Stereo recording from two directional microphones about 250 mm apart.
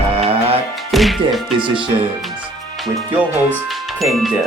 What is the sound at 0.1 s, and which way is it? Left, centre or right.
Music, right.